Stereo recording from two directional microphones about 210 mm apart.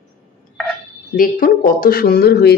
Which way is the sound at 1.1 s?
40° left (ahead or behind).